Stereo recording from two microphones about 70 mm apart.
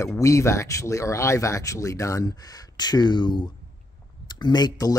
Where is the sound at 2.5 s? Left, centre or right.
Left.